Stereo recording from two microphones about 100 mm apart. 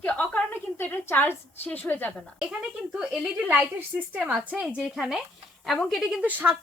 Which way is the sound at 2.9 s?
10° right (ahead or behind).